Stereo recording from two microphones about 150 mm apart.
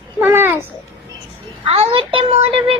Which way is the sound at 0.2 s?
15° right (ahead or behind).